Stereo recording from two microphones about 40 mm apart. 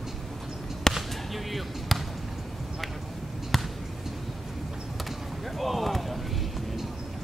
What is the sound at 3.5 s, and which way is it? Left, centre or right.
Basketball bounce, centre.